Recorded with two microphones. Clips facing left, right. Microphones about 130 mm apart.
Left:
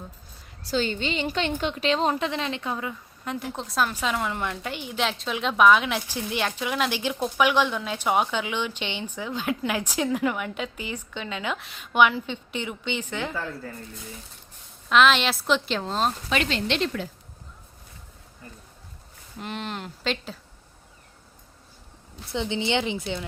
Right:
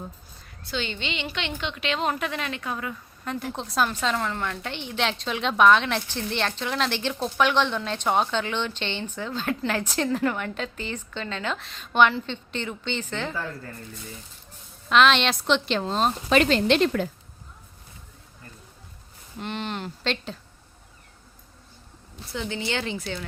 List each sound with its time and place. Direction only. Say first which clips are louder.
0.7 s a woman's voice: left 5 dB; 40° left (ahead or behind); by 3.5 s 20° left (ahead or behind)
3.5 s a woman's voice: right 1 dB; centre (ahead or behind)
13.3 s a woman's voice: left 1 dB; centre (ahead or behind)
14.8 s a woman's voice: even; 5° left (ahead or behind)
16.3 s a woman's voice: right 6 dB; 40° right (ahead or behind)
19.4 s a woman's voice: right 2 dB; centre (ahead or behind)
22.3 s a woman's voice: left 4 dB; 20° left (ahead or behind)